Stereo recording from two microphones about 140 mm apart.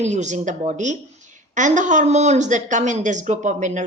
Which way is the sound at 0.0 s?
55° right (ahead or behind).